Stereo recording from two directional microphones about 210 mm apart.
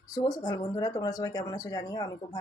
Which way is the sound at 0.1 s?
20° left (ahead or behind).